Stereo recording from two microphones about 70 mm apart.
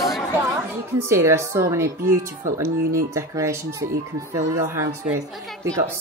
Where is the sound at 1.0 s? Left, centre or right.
Right.